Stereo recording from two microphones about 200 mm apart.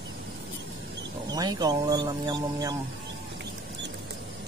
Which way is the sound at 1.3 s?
20° right (ahead or behind).